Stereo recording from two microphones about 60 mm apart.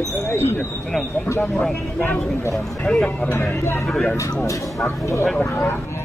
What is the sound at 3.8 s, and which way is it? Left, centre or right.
Speech, centre.